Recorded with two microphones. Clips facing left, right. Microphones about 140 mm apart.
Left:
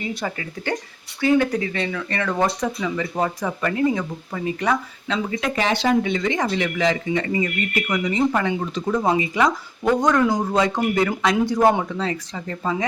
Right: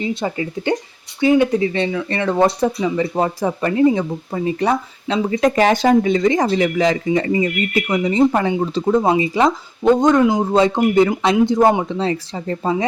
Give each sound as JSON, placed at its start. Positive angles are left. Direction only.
{"t": 0.0, "sound": "speech", "side_deg": -25}